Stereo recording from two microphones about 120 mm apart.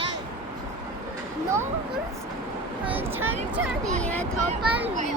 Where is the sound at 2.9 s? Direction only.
15° right (ahead or behind).